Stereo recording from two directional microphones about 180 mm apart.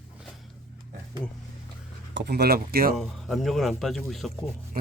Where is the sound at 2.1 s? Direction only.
65° right (ahead or behind).